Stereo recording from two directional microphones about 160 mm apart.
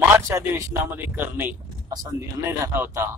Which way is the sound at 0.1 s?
20° right (ahead or behind).